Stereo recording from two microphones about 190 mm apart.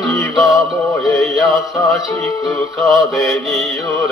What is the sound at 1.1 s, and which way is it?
Music, centre (ahead or behind).